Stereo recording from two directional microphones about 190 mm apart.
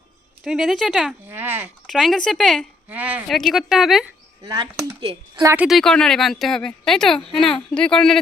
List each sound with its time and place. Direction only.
0.4 s speech: centre (ahead or behind)
1.9 s speech: centre (ahead or behind)
4.4 s speech: 25° right (ahead or behind)
5.5 s speech: 5° right (ahead or behind)